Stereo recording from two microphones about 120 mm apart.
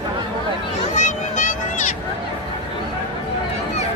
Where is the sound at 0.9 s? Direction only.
90° left.